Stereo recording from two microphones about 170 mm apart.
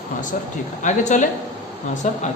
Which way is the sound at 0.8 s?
45° left (ahead or behind).